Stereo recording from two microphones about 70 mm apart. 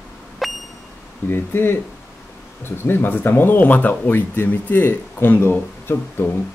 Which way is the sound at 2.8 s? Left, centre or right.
Left.